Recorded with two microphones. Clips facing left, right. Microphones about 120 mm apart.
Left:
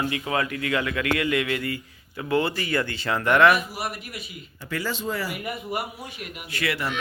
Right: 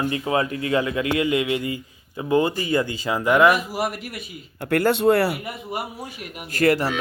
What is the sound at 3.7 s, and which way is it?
Speech, 90° right.